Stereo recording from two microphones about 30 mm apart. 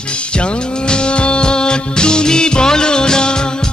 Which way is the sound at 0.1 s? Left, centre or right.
Left.